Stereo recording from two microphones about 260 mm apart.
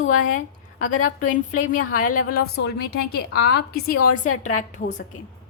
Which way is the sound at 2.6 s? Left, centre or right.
Left.